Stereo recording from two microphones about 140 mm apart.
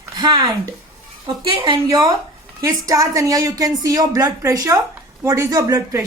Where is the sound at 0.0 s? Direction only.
30° right (ahead or behind).